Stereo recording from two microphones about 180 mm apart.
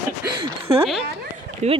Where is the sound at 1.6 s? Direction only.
40° right (ahead or behind).